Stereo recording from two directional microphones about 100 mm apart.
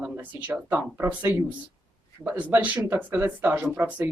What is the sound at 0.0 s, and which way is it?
Speech, 15° right (ahead or behind).